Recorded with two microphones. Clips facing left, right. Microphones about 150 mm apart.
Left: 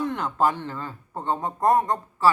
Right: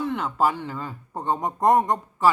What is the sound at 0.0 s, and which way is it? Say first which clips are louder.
Speech: even; centre (ahead or behind).